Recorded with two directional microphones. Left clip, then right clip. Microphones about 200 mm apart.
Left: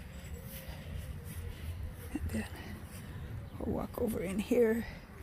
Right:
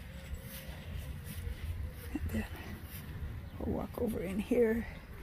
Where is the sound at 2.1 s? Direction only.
5° right (ahead or behind).